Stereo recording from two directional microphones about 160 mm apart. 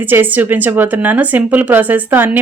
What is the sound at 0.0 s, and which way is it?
Speech, 10° right (ahead or behind).